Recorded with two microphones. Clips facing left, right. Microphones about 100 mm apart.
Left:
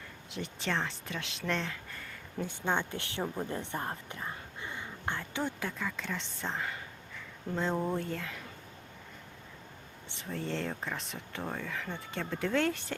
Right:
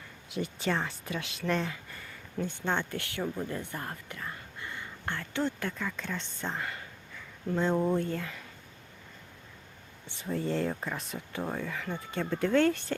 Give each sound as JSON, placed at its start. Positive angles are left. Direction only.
{"t": 0.3, "sound": "speech", "side_deg": -5}
{"t": 2.4, "sound": "a woman's voice", "side_deg": 15}
{"t": 10.2, "sound": "speech", "side_deg": -5}